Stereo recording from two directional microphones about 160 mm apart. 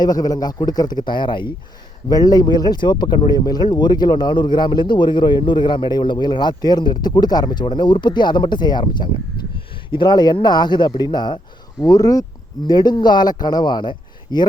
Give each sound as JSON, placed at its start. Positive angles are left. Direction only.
{"t": 0.0, "sound": "speech", "side_deg": 25}